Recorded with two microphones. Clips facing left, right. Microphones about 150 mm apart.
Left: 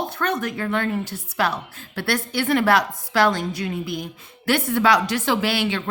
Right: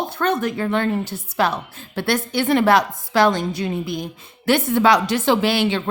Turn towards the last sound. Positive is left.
turn(degrees=-25)  # may be behind; listen again after turning